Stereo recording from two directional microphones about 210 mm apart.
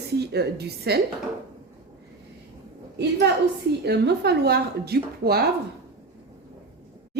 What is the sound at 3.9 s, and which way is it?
A woman's voice, 50° right (ahead or behind).